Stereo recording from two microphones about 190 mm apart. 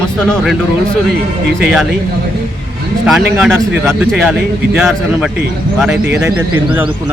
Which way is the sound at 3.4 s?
Centre (ahead or behind).